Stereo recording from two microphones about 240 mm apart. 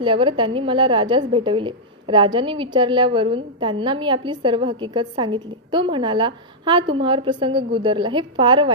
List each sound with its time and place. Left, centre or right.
0.0 s a woman's voice: right